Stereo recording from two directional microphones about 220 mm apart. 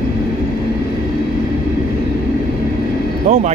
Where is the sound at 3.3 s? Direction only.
35° right (ahead or behind).